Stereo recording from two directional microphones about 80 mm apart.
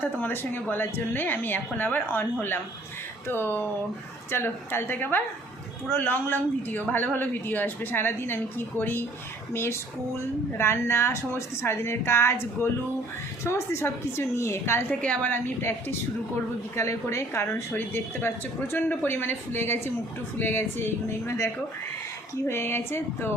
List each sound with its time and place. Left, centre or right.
0.0 s speech: left
3.2 s a woman's voice: left
14.8 s speech: centre
16.7 s a woman's voice: left